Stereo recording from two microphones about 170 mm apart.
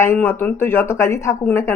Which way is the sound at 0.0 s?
15° left (ahead or behind).